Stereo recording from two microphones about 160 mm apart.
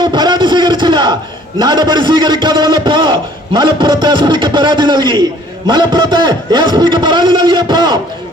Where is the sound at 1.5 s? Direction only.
25° right (ahead or behind).